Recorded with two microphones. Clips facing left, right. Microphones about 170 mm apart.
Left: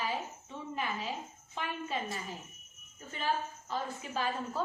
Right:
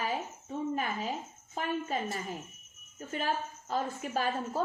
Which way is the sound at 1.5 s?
45° right (ahead or behind).